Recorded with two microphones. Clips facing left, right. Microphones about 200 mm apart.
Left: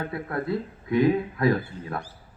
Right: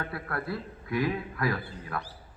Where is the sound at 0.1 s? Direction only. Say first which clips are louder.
Left 6 dB; 20° left (ahead or behind).